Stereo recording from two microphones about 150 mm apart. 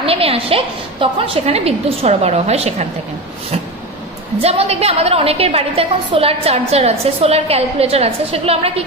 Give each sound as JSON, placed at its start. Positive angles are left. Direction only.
{"t": 0.0, "sound": "a woman's voice", "side_deg": -40}
{"t": 4.4, "sound": "a woman's voice", "side_deg": -45}